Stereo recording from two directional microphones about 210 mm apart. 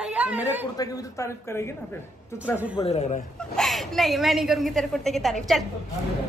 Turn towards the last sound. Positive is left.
turn(degrees=0)  # may be behind; listen again after turning